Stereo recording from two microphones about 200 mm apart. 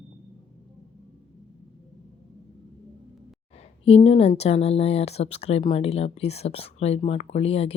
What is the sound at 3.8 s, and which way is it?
Speech, 30° left (ahead or behind).